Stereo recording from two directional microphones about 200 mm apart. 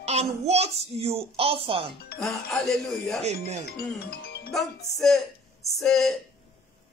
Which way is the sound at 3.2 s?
35° right (ahead or behind).